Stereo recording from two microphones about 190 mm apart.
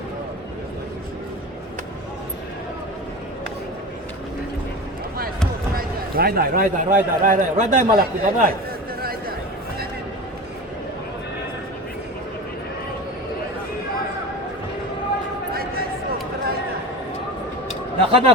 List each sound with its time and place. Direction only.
5.7 s a man's voice: 50° right (ahead or behind)
15.5 s a sound: 50° right (ahead or behind)
18.1 s a man's voice: 30° right (ahead or behind)